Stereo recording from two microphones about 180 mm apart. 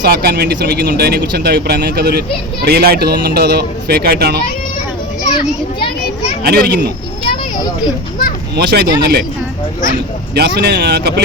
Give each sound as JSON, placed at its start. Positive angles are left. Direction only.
{"t": 0.0, "sound": "speech", "side_deg": -60}
{"t": 6.4, "sound": "speech", "side_deg": -60}
{"t": 8.5, "sound": "speech", "side_deg": -65}
{"t": 10.3, "sound": "speech", "side_deg": -65}